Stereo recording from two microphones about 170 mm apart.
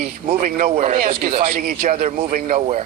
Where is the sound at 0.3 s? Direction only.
45° right (ahead or behind).